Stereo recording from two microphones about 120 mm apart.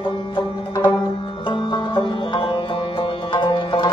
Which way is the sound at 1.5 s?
45° left (ahead or behind).